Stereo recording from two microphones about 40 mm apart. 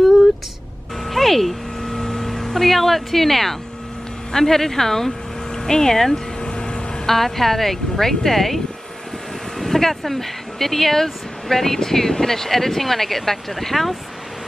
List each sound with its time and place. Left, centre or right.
0.0 s vehicle: centre
1.0 s a sound: centre
4.3 s speech: centre
6.4 s vehicle: left
7.1 s speech: centre
9.6 s speech: centre